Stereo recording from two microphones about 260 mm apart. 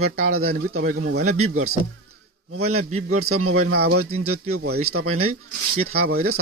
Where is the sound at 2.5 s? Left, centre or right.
Right.